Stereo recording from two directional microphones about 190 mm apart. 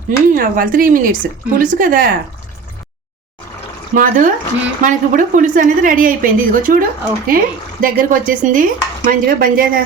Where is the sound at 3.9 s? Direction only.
45° right (ahead or behind).